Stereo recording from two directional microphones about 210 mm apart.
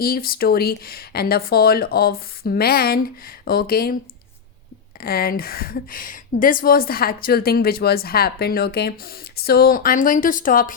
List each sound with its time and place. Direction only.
0.0 s speech: 45° left (ahead or behind)
4.9 s speech: 45° left (ahead or behind)